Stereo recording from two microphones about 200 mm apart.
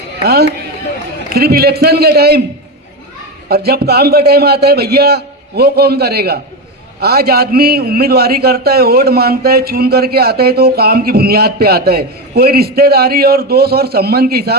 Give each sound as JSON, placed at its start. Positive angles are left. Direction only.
{"t": 0.3, "sound": "a man's voice", "side_deg": -50}
{"t": 3.5, "sound": "a man's voice", "side_deg": -50}